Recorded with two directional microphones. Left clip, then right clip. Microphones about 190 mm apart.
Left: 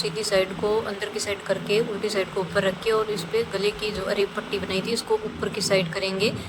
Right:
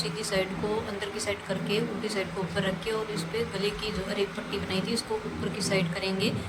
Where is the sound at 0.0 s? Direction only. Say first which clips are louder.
Left 6 dB; 15° left (ahead or behind).